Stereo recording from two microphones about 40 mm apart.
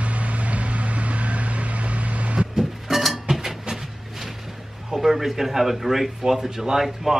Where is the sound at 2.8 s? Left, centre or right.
Centre.